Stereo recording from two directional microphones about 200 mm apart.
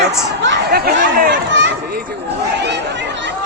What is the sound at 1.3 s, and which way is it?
Speech, 65° right (ahead or behind).